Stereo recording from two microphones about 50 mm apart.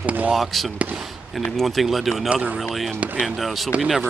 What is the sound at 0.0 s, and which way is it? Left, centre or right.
Speech, right.